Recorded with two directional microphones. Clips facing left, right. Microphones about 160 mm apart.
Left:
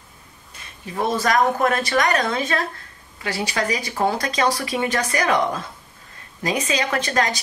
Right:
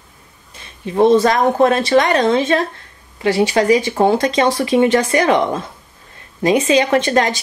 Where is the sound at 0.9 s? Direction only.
25° right (ahead or behind).